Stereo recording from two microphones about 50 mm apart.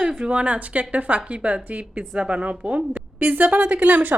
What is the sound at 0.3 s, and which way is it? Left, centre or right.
Speech, right.